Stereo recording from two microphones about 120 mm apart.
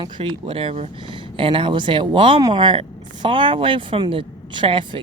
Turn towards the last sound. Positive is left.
turn(degrees=-45)  # may be behind; listen again after turning